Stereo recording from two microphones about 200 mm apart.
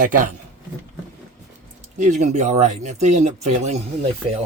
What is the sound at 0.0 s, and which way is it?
Speech, 40° right (ahead or behind).